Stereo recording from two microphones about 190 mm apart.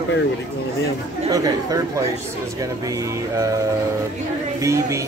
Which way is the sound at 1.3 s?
20° right (ahead or behind).